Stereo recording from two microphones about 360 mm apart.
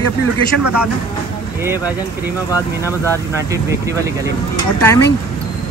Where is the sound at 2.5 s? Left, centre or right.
Centre.